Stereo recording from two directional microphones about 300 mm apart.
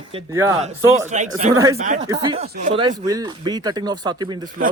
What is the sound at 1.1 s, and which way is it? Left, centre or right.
Speech, right.